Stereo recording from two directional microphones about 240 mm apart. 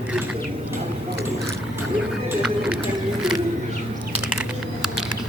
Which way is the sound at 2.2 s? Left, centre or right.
Centre.